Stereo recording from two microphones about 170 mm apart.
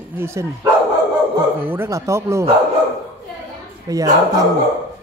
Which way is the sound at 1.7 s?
15° right (ahead or behind).